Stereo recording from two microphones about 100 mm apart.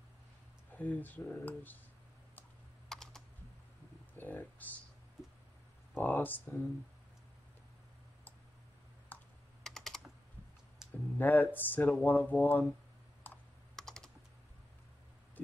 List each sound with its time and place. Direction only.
0.7 s speech: 15° left (ahead or behind)
2.9 s computer keyboard: 5° left (ahead or behind)
4.2 s speech: 20° left (ahead or behind)
5.9 s speech: 20° left (ahead or behind)
9.1 s computer keyboard: 15° left (ahead or behind)
9.6 s typing: 5° left (ahead or behind)
11.1 s speech: 20° left (ahead or behind)
13.2 s computer keyboard: 20° left (ahead or behind)
13.7 s typing: 5° left (ahead or behind)